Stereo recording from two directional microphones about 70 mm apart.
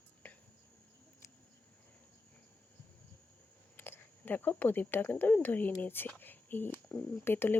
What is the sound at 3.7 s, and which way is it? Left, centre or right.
Speech, left.